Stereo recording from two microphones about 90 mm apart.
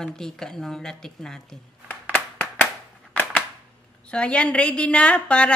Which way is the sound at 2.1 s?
20° left (ahead or behind).